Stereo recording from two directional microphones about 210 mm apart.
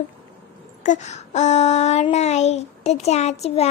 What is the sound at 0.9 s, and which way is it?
Child singing, 35° left (ahead or behind).